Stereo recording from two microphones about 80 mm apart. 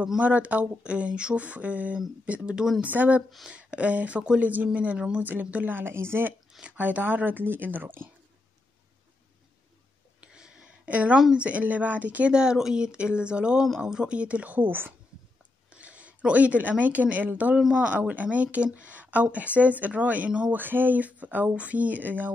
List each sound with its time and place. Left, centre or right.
0.2 s a woman's voice: centre
3.3 s speech: centre
3.5 s a woman's voice: centre
10.2 s a sound: centre
11.3 s a woman's voice: centre